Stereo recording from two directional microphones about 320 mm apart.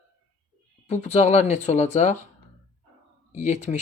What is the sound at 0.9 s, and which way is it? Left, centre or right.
Speech, left.